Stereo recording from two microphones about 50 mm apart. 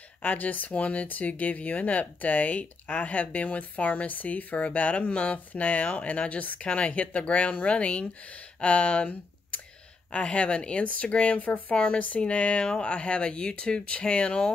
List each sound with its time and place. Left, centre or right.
0.2 s speech: left
11.7 s speech: centre